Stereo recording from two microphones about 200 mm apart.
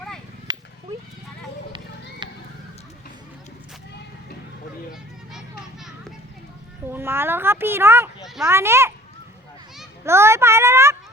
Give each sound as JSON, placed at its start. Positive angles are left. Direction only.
{"t": 0.5, "sound": "cat", "side_deg": -20}
{"t": 1.7, "sound": "children playing", "side_deg": -25}
{"t": 6.9, "sound": "speech", "side_deg": -10}
{"t": 10.0, "sound": "a sound", "side_deg": -15}